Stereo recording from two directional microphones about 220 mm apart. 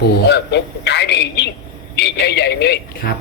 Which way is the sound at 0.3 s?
50° left (ahead or behind).